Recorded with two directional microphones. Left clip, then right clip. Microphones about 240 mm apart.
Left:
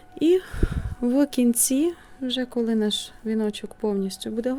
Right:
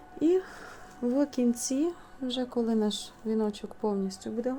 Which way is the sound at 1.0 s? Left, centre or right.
Left.